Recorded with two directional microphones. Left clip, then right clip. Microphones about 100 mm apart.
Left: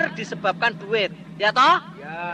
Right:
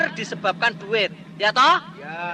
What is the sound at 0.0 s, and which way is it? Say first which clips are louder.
A man's voice: right 1 dB; 35° left (ahead or behind).